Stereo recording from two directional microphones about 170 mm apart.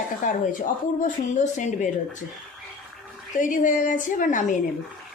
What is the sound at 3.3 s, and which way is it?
Speech, 50° left (ahead or behind).